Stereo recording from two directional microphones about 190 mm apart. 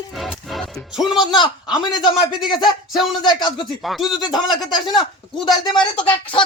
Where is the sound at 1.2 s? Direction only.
25° left (ahead or behind).